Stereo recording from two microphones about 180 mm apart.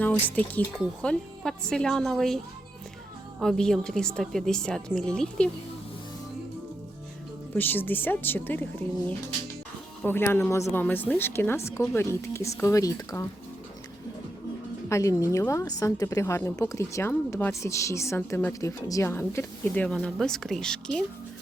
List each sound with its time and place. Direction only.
0.0 s a woman's voice: 10° left (ahead or behind)
3.4 s a woman's voice: 5° left (ahead or behind)
7.5 s a woman's voice: 10° left (ahead or behind)
10.0 s a woman's voice: 10° left (ahead or behind)
14.8 s a woman's voice: 15° left (ahead or behind)